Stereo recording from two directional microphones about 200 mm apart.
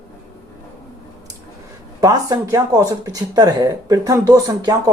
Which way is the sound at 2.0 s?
20° right (ahead or behind).